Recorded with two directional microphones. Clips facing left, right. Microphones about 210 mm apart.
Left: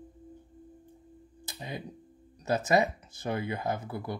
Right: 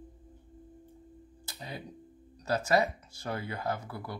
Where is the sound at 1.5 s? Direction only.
20° left (ahead or behind).